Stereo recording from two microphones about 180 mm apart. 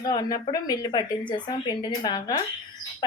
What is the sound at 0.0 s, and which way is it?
A woman's voice, 20° left (ahead or behind).